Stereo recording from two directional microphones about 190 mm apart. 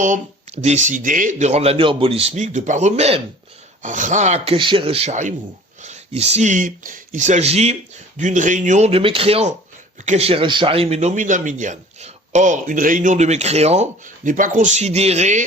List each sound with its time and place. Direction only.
0.0 s speech: 40° right (ahead or behind)